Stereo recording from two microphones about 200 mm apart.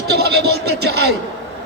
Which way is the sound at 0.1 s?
55° right (ahead or behind).